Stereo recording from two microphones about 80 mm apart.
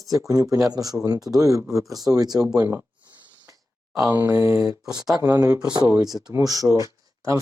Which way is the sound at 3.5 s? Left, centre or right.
Right.